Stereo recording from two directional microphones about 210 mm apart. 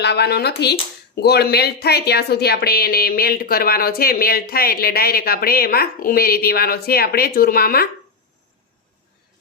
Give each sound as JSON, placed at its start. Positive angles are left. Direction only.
{"t": 0.0, "sound": "speech", "side_deg": 50}